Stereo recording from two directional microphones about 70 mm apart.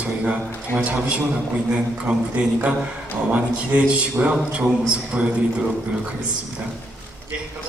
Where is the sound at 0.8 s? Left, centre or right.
Centre.